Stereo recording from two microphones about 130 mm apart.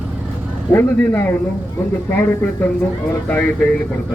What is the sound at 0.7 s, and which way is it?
A man's voice, 15° left (ahead or behind).